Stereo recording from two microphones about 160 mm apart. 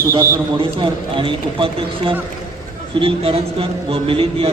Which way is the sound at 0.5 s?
30° right (ahead or behind).